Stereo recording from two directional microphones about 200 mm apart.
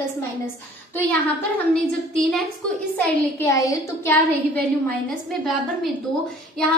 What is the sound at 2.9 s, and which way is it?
A woman's voice, 15° left (ahead or behind).